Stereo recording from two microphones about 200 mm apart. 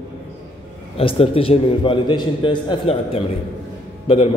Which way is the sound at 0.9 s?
30° left (ahead or behind).